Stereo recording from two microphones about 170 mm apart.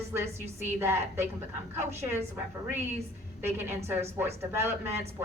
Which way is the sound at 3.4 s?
15° right (ahead or behind).